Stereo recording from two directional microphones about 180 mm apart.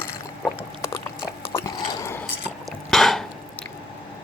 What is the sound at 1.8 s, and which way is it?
Dog, 20° left (ahead or behind).